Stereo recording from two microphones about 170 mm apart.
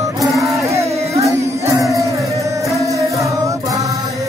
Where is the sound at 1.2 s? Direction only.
20° right (ahead or behind).